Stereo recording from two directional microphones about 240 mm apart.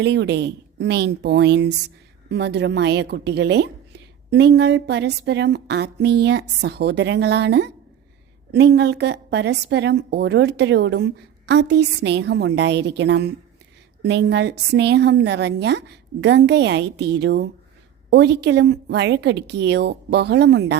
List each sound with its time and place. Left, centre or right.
0.0 s a woman's voice: right